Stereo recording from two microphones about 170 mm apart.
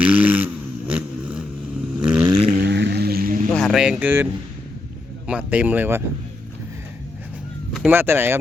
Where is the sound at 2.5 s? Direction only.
75° right (ahead or behind).